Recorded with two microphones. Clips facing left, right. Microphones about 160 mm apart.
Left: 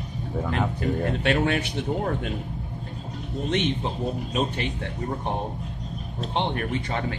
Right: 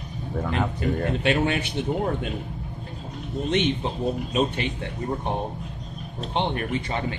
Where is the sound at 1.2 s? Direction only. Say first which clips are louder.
Even; 45° left (ahead or behind).